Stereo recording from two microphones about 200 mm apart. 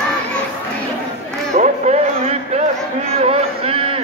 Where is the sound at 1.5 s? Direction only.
35° right (ahead or behind).